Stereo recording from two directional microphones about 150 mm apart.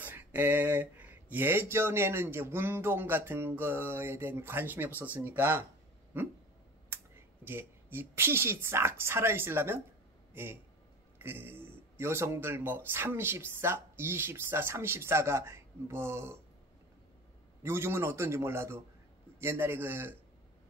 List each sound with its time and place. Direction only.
0.0 s speech: 10° right (ahead or behind)
7.4 s a man's voice: 15° right (ahead or behind)
17.6 s speech: 15° right (ahead or behind)